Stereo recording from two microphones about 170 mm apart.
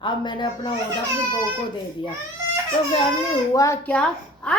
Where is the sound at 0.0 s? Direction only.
25° left (ahead or behind).